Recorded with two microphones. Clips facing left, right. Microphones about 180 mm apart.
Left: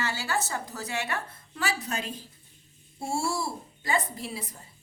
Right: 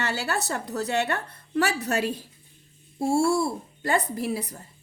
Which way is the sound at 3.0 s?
55° right (ahead or behind).